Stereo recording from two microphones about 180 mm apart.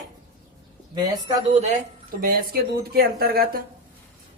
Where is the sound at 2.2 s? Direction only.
55° right (ahead or behind).